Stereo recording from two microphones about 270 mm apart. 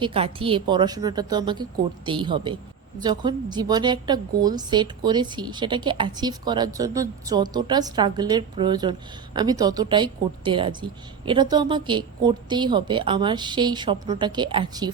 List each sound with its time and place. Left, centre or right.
0.0 s a woman's voice: centre